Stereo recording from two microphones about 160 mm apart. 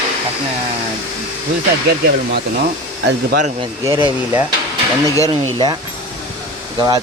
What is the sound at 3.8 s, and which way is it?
Speech, 30° right (ahead or behind).